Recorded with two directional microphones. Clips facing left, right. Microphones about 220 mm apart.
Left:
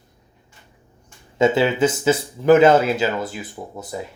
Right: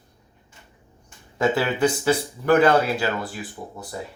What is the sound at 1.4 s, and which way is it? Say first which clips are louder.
Speech: left 4 dB; 20° left (ahead or behind).